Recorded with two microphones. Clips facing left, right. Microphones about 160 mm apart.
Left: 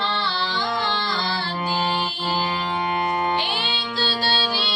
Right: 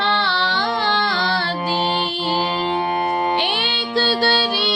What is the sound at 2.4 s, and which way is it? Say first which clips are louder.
Music: right 4 dB; 30° right (ahead or behind).